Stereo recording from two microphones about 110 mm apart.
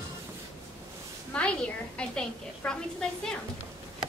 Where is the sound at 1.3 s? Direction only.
10° left (ahead or behind).